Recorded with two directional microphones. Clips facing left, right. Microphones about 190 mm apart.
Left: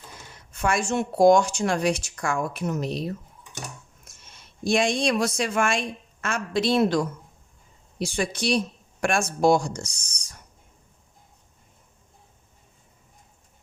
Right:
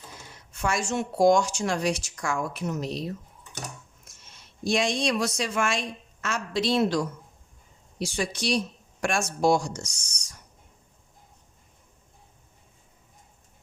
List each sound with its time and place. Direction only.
0.5 s a woman's voice: 55° left (ahead or behind)
4.6 s a woman's voice: 55° left (ahead or behind)